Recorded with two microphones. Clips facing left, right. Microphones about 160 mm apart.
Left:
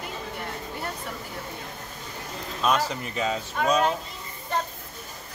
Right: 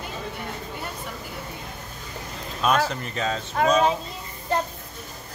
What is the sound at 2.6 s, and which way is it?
A child's voice, 5° left (ahead or behind).